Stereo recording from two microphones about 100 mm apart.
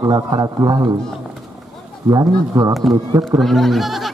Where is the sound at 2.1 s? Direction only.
40° right (ahead or behind).